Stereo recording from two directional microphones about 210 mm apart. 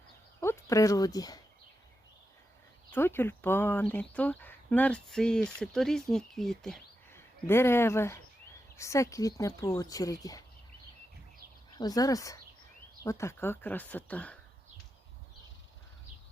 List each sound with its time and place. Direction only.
0.3 s speech: 10° left (ahead or behind)
2.9 s speech: 10° left (ahead or behind)
11.8 s speech: 15° left (ahead or behind)